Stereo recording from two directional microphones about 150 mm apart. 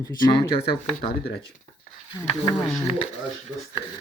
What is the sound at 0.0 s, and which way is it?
Speech, 25° left (ahead or behind).